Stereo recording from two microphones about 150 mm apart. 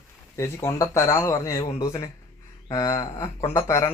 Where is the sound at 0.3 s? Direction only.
20° left (ahead or behind).